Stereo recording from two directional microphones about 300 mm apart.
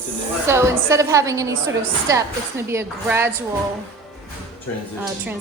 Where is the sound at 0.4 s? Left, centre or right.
Centre.